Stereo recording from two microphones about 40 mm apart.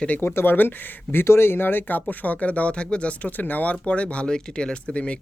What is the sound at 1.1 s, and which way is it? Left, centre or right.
Speech, left.